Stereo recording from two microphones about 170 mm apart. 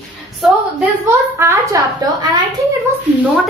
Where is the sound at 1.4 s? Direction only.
20° right (ahead or behind).